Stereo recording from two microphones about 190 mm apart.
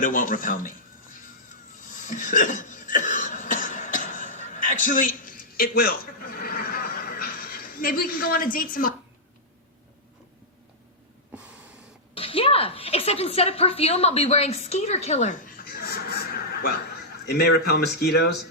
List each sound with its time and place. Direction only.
0.0 s a man's voice: 45° left (ahead or behind)
1.9 s cough: 45° left (ahead or behind)
11.3 s snort: 5° right (ahead or behind)
12.1 s a woman's voice: 30° left (ahead or behind); by 18.4 s 60° left (ahead or behind)